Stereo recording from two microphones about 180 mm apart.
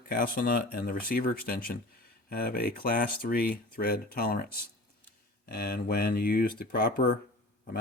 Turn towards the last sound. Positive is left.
turn(degrees=55)  # may be behind; listen again after turning